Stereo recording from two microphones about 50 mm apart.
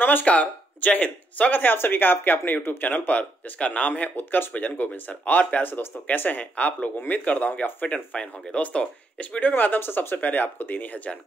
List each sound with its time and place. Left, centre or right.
0.0 s speech: left
2.9 s speech: left
4.2 s speech: left
9.4 s speech: left